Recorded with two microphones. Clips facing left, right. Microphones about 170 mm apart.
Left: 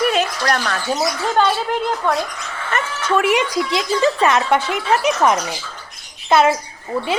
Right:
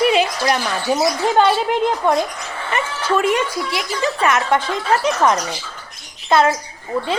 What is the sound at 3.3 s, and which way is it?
Speech, 20° left (ahead or behind).